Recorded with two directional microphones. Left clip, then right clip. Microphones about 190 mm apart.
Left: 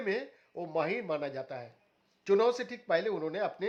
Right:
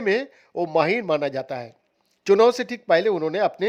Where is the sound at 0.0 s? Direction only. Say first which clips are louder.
Right 11 dB; 45° right (ahead or behind).